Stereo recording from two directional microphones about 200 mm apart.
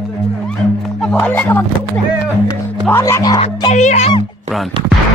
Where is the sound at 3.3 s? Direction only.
30° left (ahead or behind).